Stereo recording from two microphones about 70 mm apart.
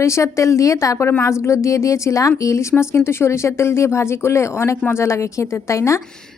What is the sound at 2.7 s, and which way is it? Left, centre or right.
A woman's voice, left.